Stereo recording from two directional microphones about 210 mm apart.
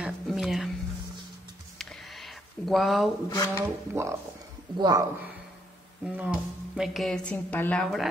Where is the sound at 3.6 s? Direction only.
15° right (ahead or behind).